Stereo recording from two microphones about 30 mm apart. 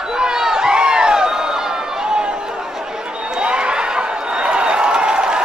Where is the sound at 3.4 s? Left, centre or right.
Right.